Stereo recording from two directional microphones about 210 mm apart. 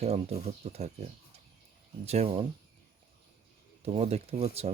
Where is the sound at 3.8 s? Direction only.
30° right (ahead or behind).